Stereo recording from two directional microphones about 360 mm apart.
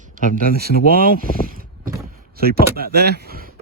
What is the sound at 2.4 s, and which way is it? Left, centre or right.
Speech, right.